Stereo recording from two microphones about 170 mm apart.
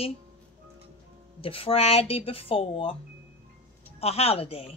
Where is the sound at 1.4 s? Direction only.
35° left (ahead or behind).